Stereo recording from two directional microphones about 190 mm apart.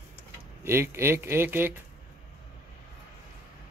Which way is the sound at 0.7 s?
15° right (ahead or behind).